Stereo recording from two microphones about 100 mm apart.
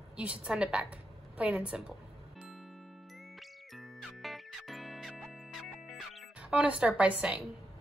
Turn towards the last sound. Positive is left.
turn(degrees=-10)  # may be behind; listen again after turning